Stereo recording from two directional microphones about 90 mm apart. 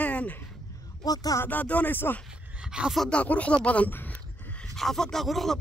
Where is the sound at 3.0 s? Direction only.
10° left (ahead or behind).